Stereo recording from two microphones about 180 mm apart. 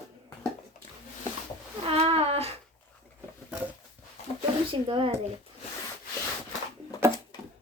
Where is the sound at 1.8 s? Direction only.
30° right (ahead or behind).